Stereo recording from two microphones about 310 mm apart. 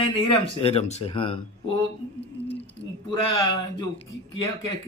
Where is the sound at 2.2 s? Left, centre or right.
Centre.